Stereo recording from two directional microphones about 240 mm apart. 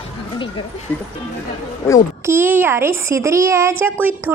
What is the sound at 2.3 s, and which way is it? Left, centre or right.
Speech, centre.